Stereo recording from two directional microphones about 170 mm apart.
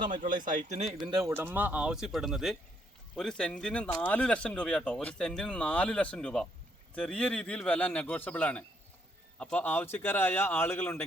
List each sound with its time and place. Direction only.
0.1 s speech: 50° right (ahead or behind)
1.1 s a man's voice: 15° right (ahead or behind); by 11.0 s 10° left (ahead or behind)